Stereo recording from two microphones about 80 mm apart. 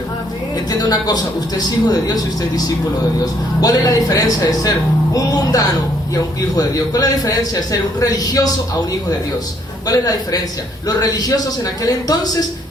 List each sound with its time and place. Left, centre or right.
0.7 s a man's voice: left
3.6 s a man's voice: left
9.8 s a man's voice: left